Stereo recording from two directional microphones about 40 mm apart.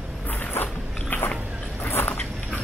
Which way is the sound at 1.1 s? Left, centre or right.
Left.